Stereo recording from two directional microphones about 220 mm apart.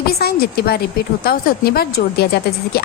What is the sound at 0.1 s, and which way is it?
Speech, 45° left (ahead or behind).